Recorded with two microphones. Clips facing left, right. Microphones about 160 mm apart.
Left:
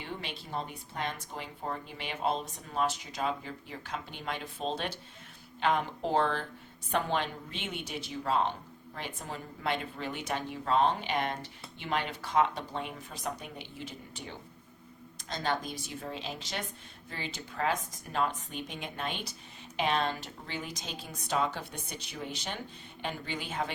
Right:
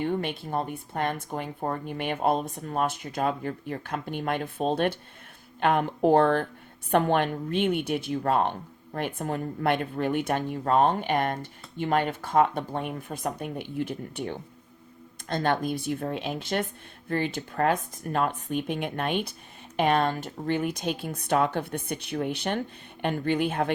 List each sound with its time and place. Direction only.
0.0 s speech: 55° right (ahead or behind)